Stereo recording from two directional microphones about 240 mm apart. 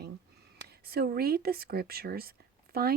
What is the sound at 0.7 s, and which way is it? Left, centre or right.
Speech, right.